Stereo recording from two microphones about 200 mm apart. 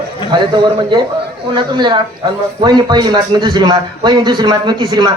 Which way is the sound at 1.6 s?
20° right (ahead or behind).